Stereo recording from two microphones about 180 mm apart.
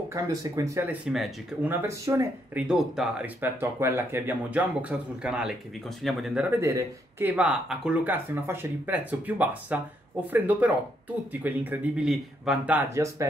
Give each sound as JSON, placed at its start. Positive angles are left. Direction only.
{"t": 0.1, "sound": "speech", "side_deg": -20}
{"t": 2.6, "sound": "speech", "side_deg": -5}
{"t": 6.5, "sound": "speech", "side_deg": -15}